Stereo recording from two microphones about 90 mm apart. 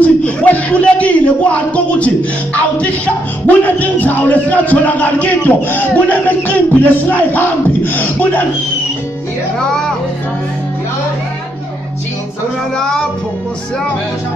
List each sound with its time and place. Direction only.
0.0 s a man's voice: 15° left (ahead or behind)